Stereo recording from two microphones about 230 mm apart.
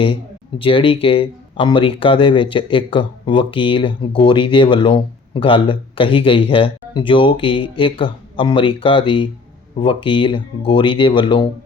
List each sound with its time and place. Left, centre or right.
0.6 s speech: left